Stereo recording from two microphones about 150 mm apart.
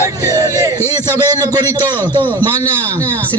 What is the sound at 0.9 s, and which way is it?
Speech, 25° right (ahead or behind).